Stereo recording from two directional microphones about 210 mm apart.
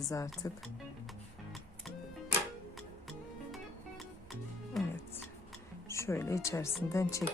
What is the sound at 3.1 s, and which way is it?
Music, centre (ahead or behind).